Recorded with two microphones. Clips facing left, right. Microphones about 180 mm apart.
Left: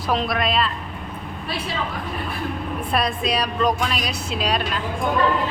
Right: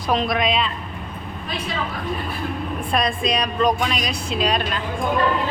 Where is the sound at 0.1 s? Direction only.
Centre (ahead or behind).